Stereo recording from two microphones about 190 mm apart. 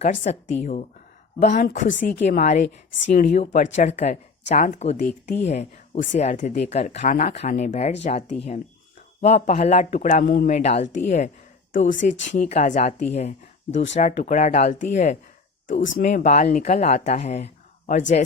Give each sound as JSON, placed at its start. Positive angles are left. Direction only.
{"t": 0.0, "sound": "speech", "side_deg": 40}